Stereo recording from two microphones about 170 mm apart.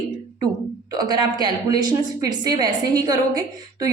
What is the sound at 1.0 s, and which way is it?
A woman's voice, 25° right (ahead or behind).